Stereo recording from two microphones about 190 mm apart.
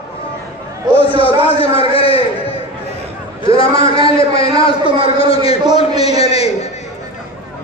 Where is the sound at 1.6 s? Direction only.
30° left (ahead or behind).